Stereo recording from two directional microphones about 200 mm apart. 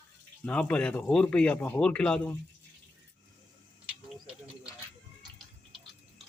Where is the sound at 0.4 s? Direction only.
5° left (ahead or behind).